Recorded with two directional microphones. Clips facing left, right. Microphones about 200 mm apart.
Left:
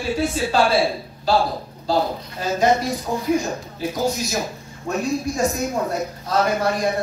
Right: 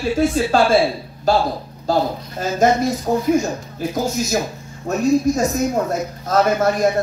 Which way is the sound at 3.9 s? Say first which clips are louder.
Right 3 dB; 45° right (ahead or behind).